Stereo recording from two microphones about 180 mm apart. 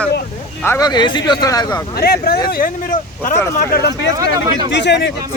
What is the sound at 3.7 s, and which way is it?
Speech, 65° left (ahead or behind).